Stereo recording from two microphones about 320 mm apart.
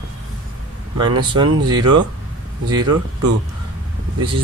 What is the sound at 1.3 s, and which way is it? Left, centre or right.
Speech, centre.